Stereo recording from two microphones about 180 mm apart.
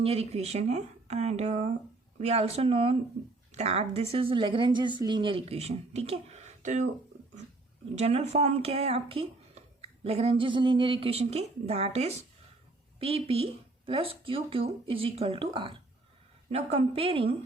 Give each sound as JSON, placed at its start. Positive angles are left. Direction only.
{"t": 0.0, "sound": "speech", "side_deg": -35}
{"t": 7.9, "sound": "speech", "side_deg": -35}